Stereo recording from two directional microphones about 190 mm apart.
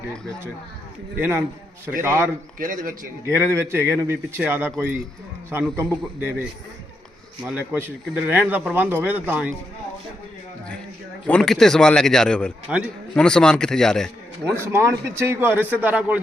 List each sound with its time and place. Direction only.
1.2 s a man's voice: 10° right (ahead or behind)
2.6 s a man's voice: 45° right (ahead or behind)
3.2 s a man's voice: 15° right (ahead or behind)
5.7 s a man's voice: 10° right (ahead or behind)
11.3 s a man's voice: 5° left (ahead or behind)
14.5 s a man's voice: 15° right (ahead or behind)